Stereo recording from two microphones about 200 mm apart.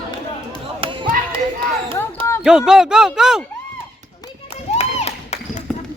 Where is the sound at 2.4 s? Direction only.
5° right (ahead or behind).